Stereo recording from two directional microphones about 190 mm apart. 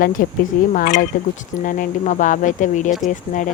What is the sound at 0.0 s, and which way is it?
Speech, 45° left (ahead or behind).